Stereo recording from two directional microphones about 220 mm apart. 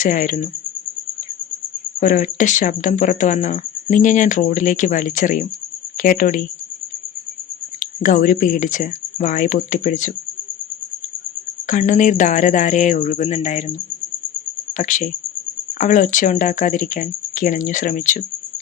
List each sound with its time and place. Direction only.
0.0 s speech: 35° left (ahead or behind)
2.0 s speech: 35° left (ahead or behind)
7.8 s speech: 35° left (ahead or behind)
11.7 s speech: 35° left (ahead or behind)
14.7 s speech: 35° left (ahead or behind)